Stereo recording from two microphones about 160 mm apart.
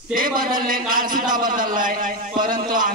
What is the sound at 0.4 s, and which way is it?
A man's voice, 60° right (ahead or behind).